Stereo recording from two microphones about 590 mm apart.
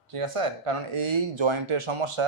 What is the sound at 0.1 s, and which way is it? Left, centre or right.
Speech, right.